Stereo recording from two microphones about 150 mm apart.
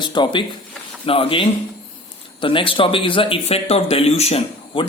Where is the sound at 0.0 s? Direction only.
30° left (ahead or behind).